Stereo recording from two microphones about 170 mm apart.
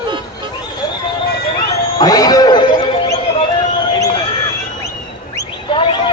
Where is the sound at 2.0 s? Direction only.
20° left (ahead or behind).